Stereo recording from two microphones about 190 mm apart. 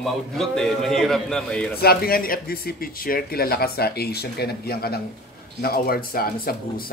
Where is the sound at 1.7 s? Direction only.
55° left (ahead or behind).